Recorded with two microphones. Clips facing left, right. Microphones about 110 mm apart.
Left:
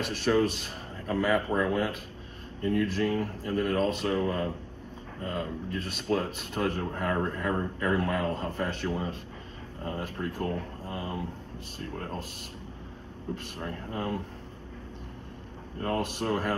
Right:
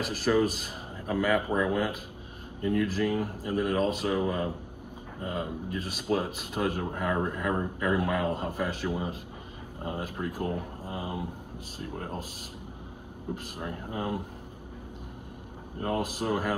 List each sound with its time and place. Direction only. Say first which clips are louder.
0.0 s a man's voice: even; 5° right (ahead or behind)
13.3 s a man's voice: even; 15° right (ahead or behind)
15.8 s a man's voice: even; 10° right (ahead or behind)